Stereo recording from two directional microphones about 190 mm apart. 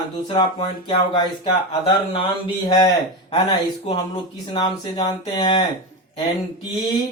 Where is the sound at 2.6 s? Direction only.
20° left (ahead or behind).